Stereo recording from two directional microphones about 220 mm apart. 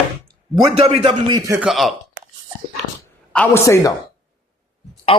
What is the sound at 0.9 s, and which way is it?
Speech, 20° right (ahead or behind).